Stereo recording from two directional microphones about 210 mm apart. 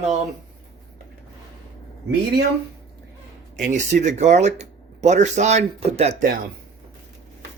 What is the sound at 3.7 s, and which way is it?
A man's voice, 35° right (ahead or behind).